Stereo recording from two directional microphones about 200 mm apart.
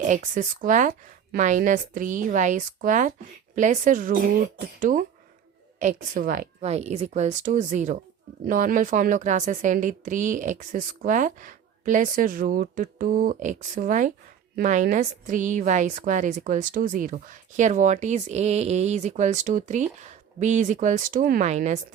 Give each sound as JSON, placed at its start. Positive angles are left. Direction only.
{"t": 0.0, "sound": "speech", "side_deg": -40}